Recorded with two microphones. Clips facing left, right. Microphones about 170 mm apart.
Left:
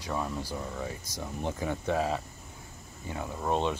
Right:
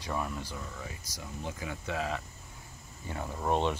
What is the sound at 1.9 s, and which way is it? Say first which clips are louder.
Speech: left 5 dB; 30° left (ahead or behind).